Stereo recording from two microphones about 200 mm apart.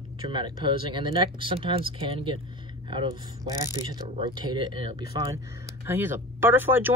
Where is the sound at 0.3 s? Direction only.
25° right (ahead or behind).